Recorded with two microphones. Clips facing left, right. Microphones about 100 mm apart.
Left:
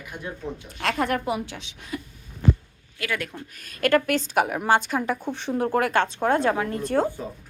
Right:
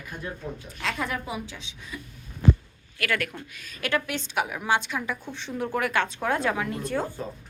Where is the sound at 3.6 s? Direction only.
50° left (ahead or behind).